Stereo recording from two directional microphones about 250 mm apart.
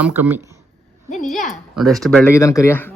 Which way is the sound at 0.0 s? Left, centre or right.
Centre.